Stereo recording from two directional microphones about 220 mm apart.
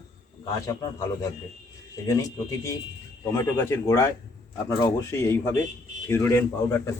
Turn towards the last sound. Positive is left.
turn(degrees=10)  # may be behind; listen again after turning